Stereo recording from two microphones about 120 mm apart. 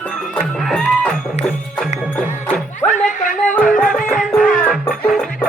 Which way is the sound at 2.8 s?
15° left (ahead or behind).